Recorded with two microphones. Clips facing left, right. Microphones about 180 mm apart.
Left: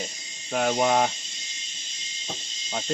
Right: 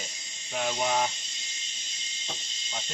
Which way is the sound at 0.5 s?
60° left (ahead or behind).